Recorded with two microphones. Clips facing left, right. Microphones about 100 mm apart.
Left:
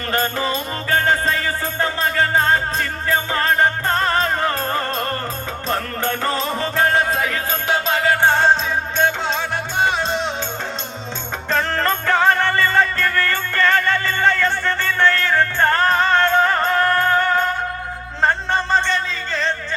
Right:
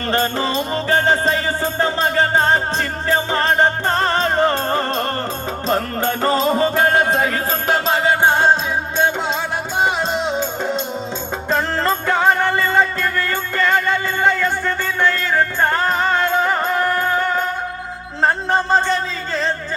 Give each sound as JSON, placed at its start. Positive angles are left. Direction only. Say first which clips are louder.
{"t": 0.1, "sound": "music", "louder": "right 2 dB", "side_deg": -30}
{"t": 8.2, "sound": "music", "louder": "right 1 dB", "side_deg": -15}
{"t": 12.0, "sound": "music", "louder": "even", "side_deg": -15}
{"t": 18.8, "sound": "a sound", "louder": "right 2 dB", "side_deg": -5}